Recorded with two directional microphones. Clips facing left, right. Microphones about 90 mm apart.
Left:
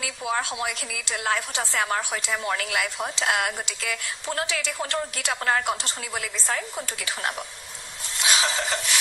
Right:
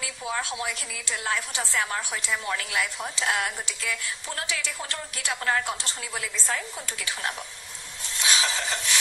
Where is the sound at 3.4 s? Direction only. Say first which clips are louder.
Left 2 dB; 55° left (ahead or behind).